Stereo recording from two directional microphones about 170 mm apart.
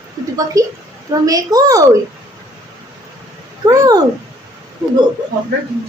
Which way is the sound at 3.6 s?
20° right (ahead or behind).